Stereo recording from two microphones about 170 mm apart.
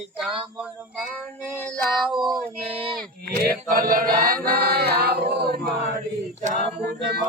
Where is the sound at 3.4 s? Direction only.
55° right (ahead or behind).